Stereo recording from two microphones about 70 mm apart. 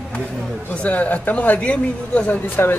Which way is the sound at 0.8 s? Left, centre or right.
Left.